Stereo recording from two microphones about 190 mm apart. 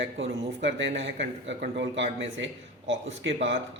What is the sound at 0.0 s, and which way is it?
Speech, 75° right (ahead or behind).